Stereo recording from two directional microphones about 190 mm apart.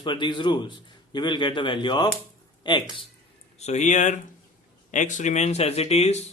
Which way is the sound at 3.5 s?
35° left (ahead or behind).